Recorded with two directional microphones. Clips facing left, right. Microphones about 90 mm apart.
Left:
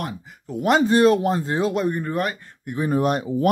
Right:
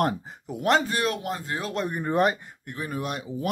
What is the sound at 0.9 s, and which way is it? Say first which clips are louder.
Speech: left 11 dB; 35° left (ahead or behind).